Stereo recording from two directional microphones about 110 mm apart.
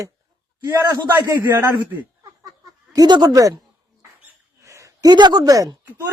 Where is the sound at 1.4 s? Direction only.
25° right (ahead or behind).